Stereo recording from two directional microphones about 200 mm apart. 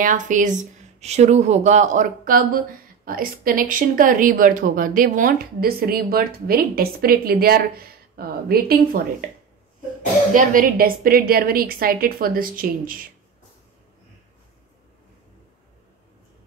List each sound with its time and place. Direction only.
0.0 s a woman's voice: 40° right (ahead or behind)
10.3 s a woman's voice: 45° right (ahead or behind)